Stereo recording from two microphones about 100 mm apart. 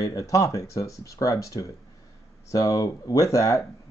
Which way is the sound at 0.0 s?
35° left (ahead or behind).